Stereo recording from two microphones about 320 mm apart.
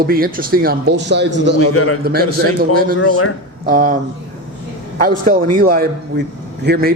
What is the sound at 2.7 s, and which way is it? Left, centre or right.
Speech, right.